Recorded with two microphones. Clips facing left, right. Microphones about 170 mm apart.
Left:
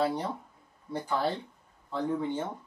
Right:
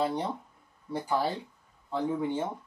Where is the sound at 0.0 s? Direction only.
5° left (ahead or behind).